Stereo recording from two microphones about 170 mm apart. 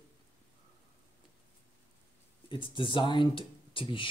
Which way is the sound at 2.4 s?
30° left (ahead or behind).